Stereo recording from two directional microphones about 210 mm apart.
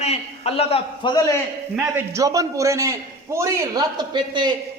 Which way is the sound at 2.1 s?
15° right (ahead or behind).